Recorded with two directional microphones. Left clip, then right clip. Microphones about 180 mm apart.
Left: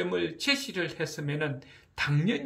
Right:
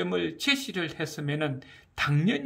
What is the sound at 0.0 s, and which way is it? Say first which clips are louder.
Speech: right 1 dB; 35° right (ahead or behind).